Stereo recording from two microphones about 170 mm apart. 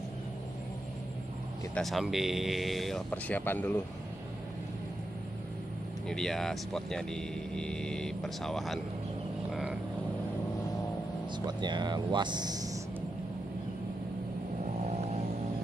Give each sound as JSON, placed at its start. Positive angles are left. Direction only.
{"t": 1.8, "sound": "speech", "side_deg": 0}
{"t": 6.0, "sound": "speech", "side_deg": 5}
{"t": 9.5, "sound": "vehicle", "side_deg": -5}
{"t": 11.4, "sound": "speech", "side_deg": -25}